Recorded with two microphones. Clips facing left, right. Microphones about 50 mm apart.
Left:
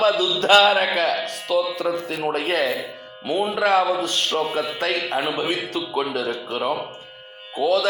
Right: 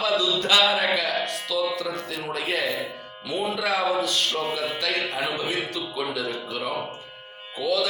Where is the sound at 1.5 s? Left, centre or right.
Left.